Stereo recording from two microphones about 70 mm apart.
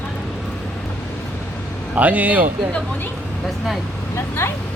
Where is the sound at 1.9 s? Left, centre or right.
Right.